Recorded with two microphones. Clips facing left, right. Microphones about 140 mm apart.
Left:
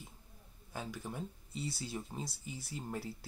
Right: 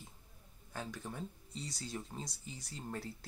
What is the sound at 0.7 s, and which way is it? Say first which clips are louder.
Speech: left 1 dB; 5° left (ahead or behind).